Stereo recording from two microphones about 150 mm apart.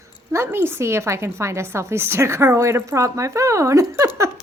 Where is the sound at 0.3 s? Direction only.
15° right (ahead or behind).